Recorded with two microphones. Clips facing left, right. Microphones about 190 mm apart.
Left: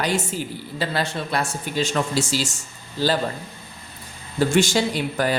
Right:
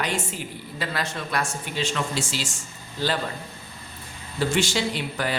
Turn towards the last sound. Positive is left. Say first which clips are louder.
# left 5 dB
turn(degrees=45)  # may be behind; listen again after turning